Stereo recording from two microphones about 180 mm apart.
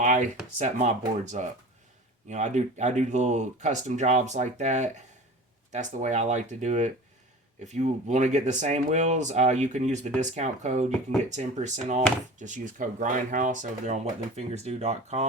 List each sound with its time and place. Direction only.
0.0 s speech: 45° right (ahead or behind)